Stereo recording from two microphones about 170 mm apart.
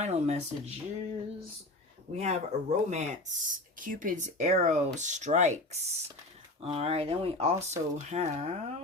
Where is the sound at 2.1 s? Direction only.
40° right (ahead or behind).